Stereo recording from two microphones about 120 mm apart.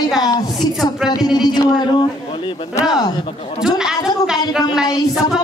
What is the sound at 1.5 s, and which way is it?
Speech, 40° left (ahead or behind).